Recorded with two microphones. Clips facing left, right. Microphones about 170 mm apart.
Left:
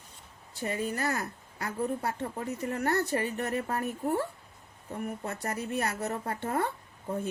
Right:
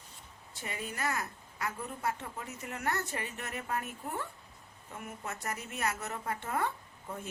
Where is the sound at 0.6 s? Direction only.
40° left (ahead or behind).